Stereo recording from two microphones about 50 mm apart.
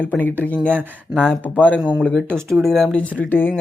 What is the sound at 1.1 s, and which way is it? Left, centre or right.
Speech, left.